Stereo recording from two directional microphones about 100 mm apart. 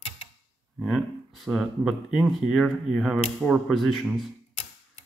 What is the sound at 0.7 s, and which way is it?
A man's voice, centre (ahead or behind).